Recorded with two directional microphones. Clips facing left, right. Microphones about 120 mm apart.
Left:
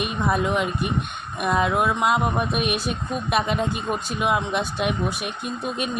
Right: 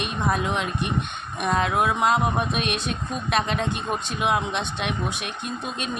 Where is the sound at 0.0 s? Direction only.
5° left (ahead or behind).